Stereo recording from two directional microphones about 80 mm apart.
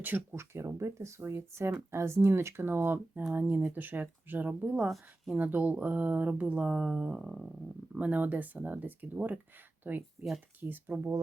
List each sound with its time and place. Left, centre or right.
0.0 s speech: right
0.5 s speech: right
4.9 s speech: centre
5.4 s speech: right